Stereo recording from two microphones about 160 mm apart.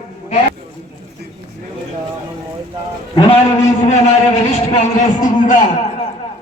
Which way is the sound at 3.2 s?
35° left (ahead or behind).